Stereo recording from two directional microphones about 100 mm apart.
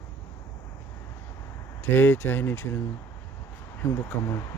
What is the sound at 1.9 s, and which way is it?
Speech, 20° left (ahead or behind).